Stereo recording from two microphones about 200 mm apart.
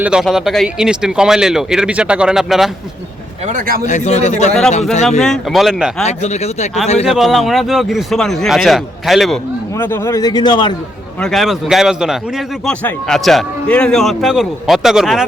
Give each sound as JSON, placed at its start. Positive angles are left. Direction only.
{"t": 0.0, "sound": "a man's voice", "side_deg": -5}
{"t": 3.4, "sound": "speech", "side_deg": -40}
{"t": 3.8, "sound": "speech", "side_deg": 35}
{"t": 5.2, "sound": "a man's voice", "side_deg": 0}
{"t": 6.0, "sound": "speech", "side_deg": 35}
{"t": 7.1, "sound": "a man's voice", "side_deg": 0}
{"t": 9.7, "sound": "a man's voice", "side_deg": 10}
{"t": 11.2, "sound": "a man's voice", "side_deg": 0}